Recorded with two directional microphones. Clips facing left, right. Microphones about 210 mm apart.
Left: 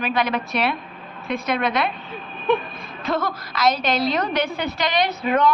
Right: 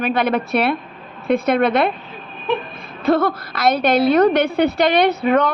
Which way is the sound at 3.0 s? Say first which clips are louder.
Right 8 dB; 60° right (ahead or behind).